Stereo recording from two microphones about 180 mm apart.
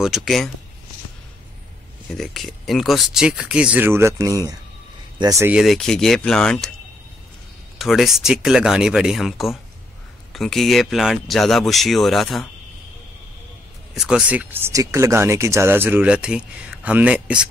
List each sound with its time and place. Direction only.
0.0 s speech: centre (ahead or behind)
2.0 s speech: centre (ahead or behind); by 5.6 s 15° right (ahead or behind)
5.6 s speech: centre (ahead or behind)
7.8 s speech: centre (ahead or behind)
13.9 s speech: 5° right (ahead or behind)